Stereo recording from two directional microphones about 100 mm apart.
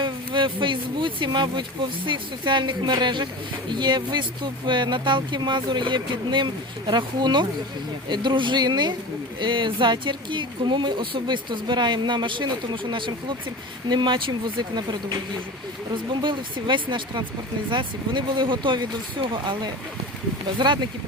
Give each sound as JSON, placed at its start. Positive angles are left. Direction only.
{"t": 0.0, "sound": "speech", "side_deg": -55}
{"t": 16.2, "sound": "speech", "side_deg": -55}